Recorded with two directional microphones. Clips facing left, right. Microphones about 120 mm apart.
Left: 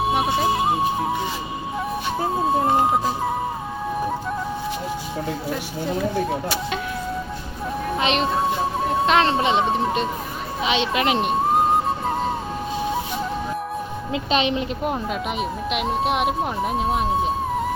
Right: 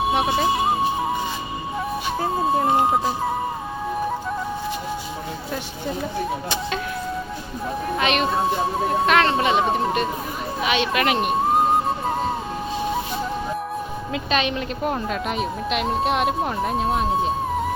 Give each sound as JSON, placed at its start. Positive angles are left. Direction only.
{"t": 0.0, "sound": "music", "side_deg": 0}
{"t": 2.1, "sound": "music", "side_deg": 5}
{"t": 7.9, "sound": "music", "side_deg": 25}
{"t": 9.0, "sound": "a woman's voice", "side_deg": 25}
{"t": 11.5, "sound": "music", "side_deg": 0}
{"t": 14.1, "sound": "a woman's voice", "side_deg": 25}
{"t": 14.9, "sound": "speech", "side_deg": 10}